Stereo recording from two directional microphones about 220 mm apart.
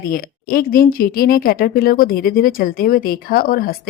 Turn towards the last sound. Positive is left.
turn(degrees=40)  # may be behind; listen again after turning